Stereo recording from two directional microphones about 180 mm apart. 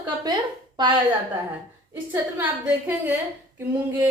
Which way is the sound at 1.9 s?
10° right (ahead or behind).